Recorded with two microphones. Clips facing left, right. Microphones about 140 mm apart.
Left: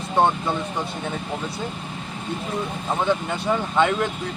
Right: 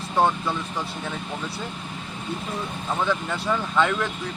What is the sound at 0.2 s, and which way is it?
Speech, 20° left (ahead or behind).